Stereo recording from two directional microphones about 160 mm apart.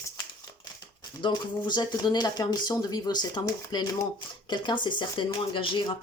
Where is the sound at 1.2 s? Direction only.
25° left (ahead or behind).